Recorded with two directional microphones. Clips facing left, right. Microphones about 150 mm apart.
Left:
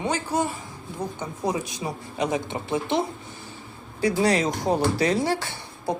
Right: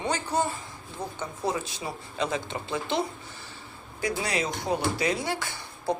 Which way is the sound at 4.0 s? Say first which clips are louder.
Left 7 dB; 35° left (ahead or behind).